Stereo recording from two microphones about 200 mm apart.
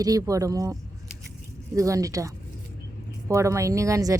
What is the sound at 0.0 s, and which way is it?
Speech, 15° right (ahead or behind).